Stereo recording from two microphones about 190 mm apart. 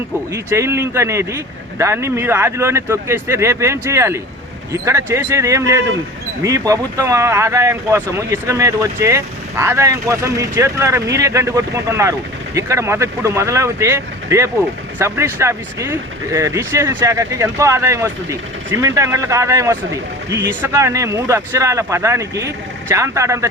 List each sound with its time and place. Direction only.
0.3 s speech: 15° right (ahead or behind)